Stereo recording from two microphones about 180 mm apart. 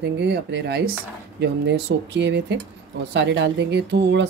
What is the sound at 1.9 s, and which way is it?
Speech, 90° right.